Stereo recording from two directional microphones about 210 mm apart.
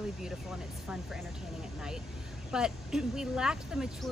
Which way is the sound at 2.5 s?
5° right (ahead or behind).